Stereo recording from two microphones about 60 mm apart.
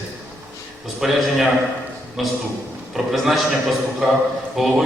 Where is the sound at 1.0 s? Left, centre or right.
Centre.